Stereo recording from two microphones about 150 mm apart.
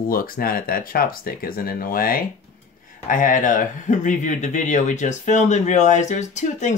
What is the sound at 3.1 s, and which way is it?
Speech, 60° left (ahead or behind).